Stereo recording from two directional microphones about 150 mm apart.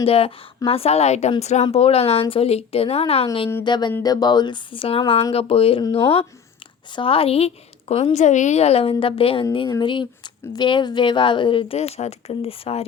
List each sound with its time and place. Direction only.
0.0 s speech: 40° left (ahead or behind)
3.6 s a sound: 30° left (ahead or behind)
4.0 s speech: 25° left (ahead or behind)